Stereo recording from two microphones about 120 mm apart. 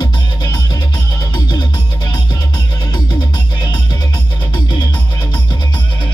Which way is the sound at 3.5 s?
35° left (ahead or behind).